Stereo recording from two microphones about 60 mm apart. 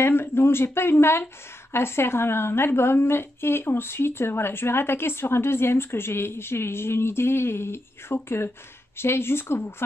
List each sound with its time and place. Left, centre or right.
0.0 s a woman's voice: left